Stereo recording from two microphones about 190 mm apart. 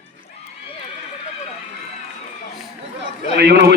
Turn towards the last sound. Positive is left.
turn(degrees=-60)  # may be behind; listen again after turning